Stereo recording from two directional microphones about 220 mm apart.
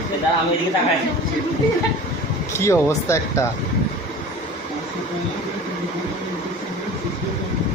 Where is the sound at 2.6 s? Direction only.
15° left (ahead or behind).